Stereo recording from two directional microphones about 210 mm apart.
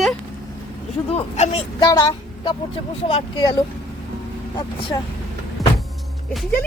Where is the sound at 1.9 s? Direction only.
20° left (ahead or behind).